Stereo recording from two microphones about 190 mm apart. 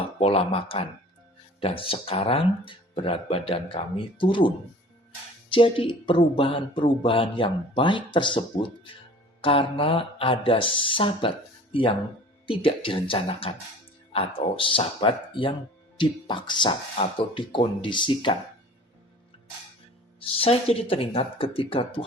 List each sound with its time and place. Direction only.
0.2 s speech: 30° left (ahead or behind)
20.4 s speech: 30° left (ahead or behind)